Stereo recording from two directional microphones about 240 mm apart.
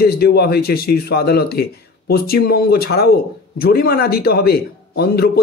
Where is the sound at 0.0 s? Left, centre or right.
Left.